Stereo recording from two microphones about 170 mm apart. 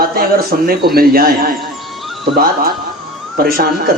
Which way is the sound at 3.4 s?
60° right (ahead or behind).